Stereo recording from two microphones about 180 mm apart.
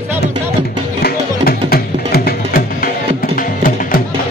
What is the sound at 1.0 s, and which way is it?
Music, 60° left (ahead or behind).